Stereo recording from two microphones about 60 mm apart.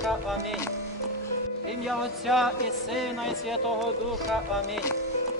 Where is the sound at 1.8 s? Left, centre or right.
Centre.